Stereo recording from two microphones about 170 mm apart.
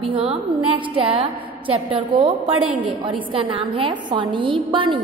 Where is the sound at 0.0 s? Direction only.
35° right (ahead or behind).